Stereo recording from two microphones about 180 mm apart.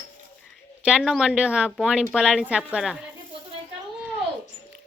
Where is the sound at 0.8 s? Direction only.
5° right (ahead or behind).